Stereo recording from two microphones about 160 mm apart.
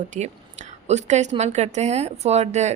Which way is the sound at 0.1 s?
50° right (ahead or behind).